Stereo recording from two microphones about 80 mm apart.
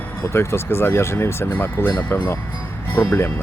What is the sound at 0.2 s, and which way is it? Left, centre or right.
Speech, left.